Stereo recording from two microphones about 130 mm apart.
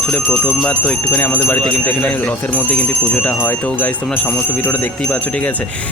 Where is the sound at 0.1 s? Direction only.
10° left (ahead or behind).